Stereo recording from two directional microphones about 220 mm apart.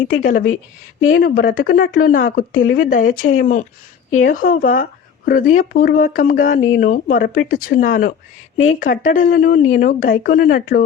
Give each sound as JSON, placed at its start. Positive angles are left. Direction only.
{"t": 0.2, "sound": "speech", "side_deg": 35}